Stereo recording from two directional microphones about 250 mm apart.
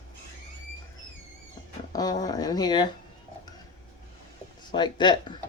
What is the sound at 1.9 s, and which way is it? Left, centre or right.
Speech, centre.